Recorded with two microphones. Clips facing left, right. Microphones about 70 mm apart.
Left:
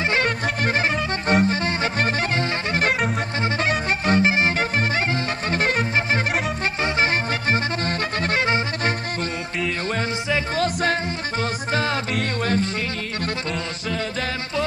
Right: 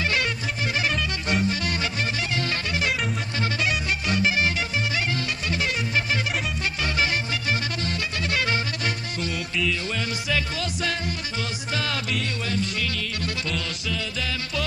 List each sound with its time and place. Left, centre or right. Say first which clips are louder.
0.3 s music: left 6 dB; left
9.6 s music: left 3 dB; left
12.1 s music: left 5 dB; left